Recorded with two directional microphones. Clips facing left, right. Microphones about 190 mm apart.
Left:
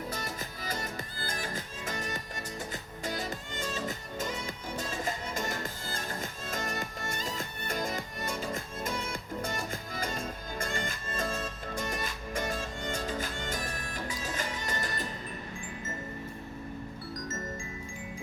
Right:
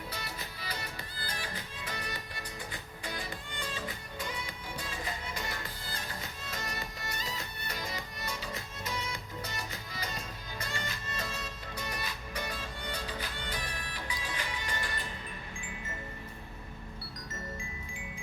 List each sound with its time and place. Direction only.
0.1 s music: 45° left (ahead or behind)